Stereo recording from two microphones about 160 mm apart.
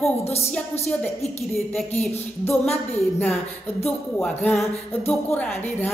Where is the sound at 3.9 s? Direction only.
10° left (ahead or behind).